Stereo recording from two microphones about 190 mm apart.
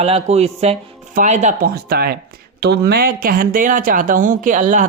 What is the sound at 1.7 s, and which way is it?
Speech, 55° right (ahead or behind).